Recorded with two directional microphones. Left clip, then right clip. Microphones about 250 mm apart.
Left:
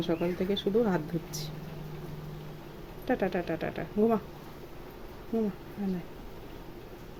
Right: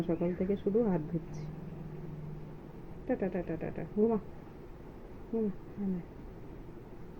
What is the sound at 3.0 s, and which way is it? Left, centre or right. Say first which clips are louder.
A woman's voice: left 5 dB; centre.